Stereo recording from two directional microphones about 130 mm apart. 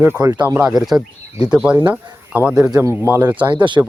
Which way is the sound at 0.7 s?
5° right (ahead or behind).